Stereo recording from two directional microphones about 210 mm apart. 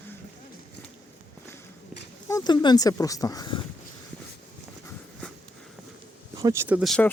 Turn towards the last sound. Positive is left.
turn(degrees=0)  # may be behind; listen again after turning